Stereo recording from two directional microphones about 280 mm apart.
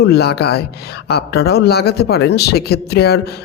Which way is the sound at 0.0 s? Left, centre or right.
Left.